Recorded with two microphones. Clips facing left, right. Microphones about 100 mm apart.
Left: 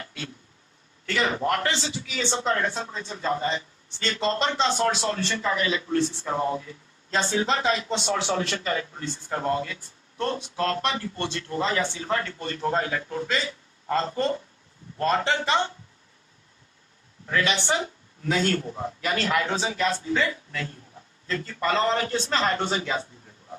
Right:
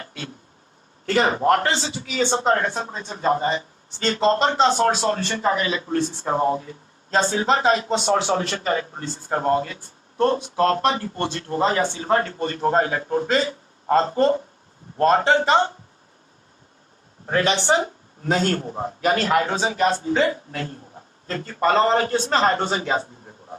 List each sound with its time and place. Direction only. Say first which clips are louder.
0.0 s a sound: right 2 dB; 40° right (ahead or behind)
1.0 s a man's voice: right 7 dB; 40° right (ahead or behind)
17.2 s a man's voice: right 5 dB; 40° right (ahead or behind)